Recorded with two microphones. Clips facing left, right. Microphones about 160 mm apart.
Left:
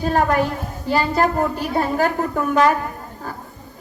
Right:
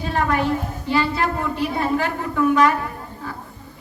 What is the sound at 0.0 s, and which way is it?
A woman's voice, 40° left (ahead or behind).